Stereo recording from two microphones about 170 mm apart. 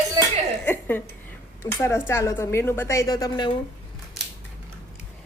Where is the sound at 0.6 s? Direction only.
10° left (ahead or behind).